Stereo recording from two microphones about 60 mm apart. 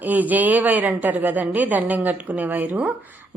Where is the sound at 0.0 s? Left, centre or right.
Right.